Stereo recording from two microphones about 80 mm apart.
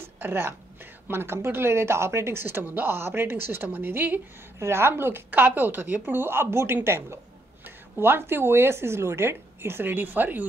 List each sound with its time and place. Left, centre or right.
0.2 s a woman's voice: right